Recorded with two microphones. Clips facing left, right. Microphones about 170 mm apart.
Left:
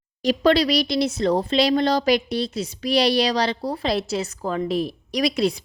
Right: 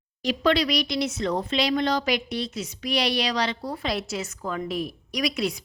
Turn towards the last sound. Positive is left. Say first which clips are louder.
# left 5 dB
turn(degrees=35)  # may be behind; listen again after turning